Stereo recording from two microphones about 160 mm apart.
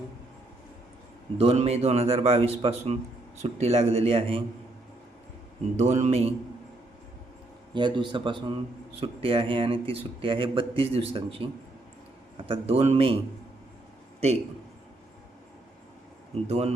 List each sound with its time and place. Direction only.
1.4 s speech: 40° right (ahead or behind)
5.7 s speech: 45° right (ahead or behind)
7.7 s a man's voice: 30° right (ahead or behind)
16.3 s speech: 40° right (ahead or behind)